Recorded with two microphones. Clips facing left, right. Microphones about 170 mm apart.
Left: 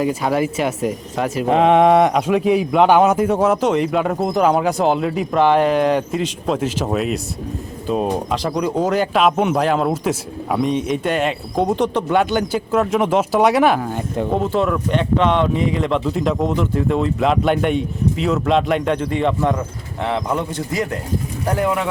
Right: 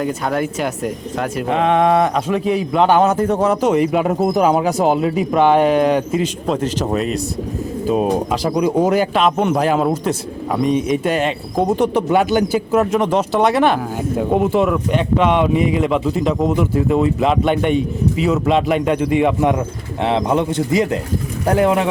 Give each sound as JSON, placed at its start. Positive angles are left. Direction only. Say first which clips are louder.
{"t": 0.0, "sound": "a man's voice", "louder": "left 1 dB", "side_deg": 5}
{"t": 1.6, "sound": "a man's voice", "louder": "left 2 dB", "side_deg": 20}
{"t": 9.1, "sound": "a man's voice", "louder": "even", "side_deg": 0}